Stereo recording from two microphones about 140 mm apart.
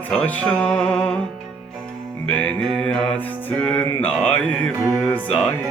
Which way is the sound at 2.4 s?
5° left (ahead or behind).